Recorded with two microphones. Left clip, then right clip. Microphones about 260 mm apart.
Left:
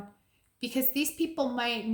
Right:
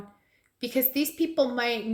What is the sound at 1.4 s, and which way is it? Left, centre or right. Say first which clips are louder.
Speech: right 6 dB; left.